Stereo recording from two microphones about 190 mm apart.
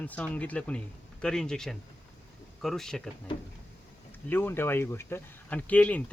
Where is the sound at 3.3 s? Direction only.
25° left (ahead or behind).